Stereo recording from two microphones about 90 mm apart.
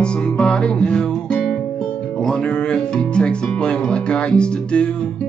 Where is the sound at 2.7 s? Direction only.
10° left (ahead or behind).